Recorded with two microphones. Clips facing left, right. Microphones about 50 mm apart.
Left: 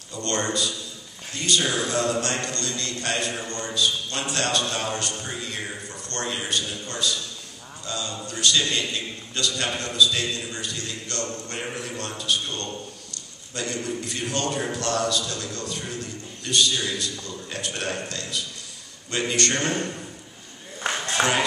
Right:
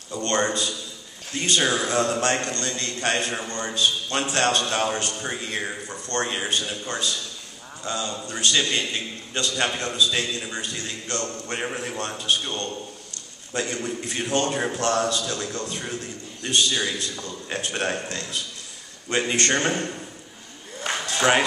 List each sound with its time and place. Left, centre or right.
0.1 s a man's voice: right
3.3 s a man's voice: right
3.7 s a man's voice: right
21.2 s speech: left